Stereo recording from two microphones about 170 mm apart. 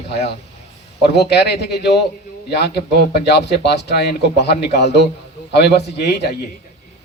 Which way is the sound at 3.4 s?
80° left.